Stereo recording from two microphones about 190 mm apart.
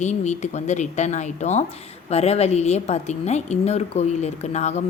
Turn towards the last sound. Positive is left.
turn(degrees=35)  # may be behind; listen again after turning